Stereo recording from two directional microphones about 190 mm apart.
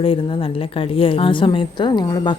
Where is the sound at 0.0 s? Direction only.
30° left (ahead or behind).